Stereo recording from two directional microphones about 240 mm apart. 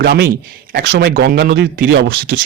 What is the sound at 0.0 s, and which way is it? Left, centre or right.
A man's voice, right.